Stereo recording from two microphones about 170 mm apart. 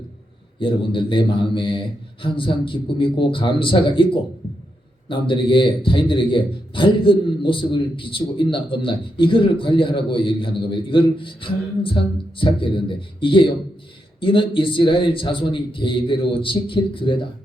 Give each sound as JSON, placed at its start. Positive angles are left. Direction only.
{"t": 0.6, "sound": "a man's voice", "side_deg": 30}